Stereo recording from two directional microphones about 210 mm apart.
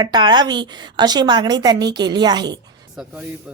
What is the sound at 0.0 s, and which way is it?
A woman's voice, 20° right (ahead or behind).